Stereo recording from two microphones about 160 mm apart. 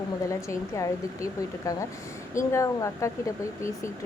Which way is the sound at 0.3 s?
20° left (ahead or behind).